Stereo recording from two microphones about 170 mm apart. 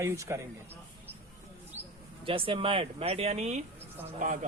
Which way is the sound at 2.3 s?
30° right (ahead or behind).